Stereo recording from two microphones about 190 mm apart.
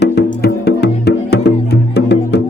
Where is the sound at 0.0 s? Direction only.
60° left (ahead or behind).